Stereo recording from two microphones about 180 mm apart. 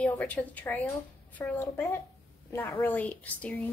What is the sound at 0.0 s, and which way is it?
A woman's voice, 10° left (ahead or behind).